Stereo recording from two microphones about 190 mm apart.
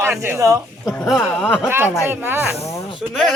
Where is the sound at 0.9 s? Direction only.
Centre (ahead or behind).